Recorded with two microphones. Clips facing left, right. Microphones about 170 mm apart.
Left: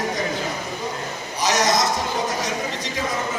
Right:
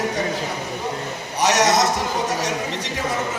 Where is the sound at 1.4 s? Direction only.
70° right (ahead or behind).